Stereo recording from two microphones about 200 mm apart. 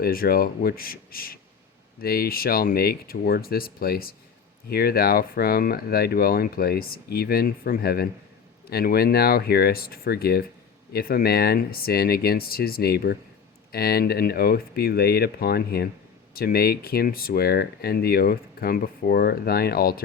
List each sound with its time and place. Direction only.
0.0 s speech: 45° left (ahead or behind)